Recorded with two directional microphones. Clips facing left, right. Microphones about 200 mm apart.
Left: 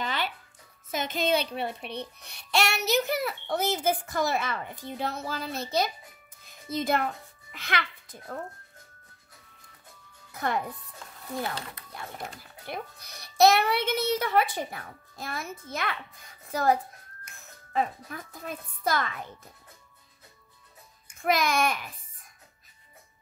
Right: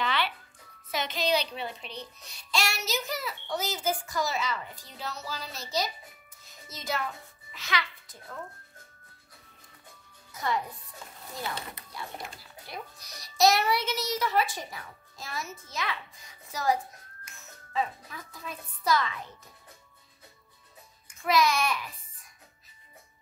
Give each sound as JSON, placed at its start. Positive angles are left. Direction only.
{"t": 0.0, "sound": "music", "side_deg": 45}
{"t": 0.9, "sound": "a child's voice", "side_deg": 50}
{"t": 6.4, "sound": "music", "side_deg": 55}
{"t": 7.5, "sound": "a child's voice", "side_deg": 60}
{"t": 10.3, "sound": "speech", "side_deg": 55}
{"t": 12.4, "sound": "a child's voice", "side_deg": 55}
{"t": 21.2, "sound": "babbling", "side_deg": 50}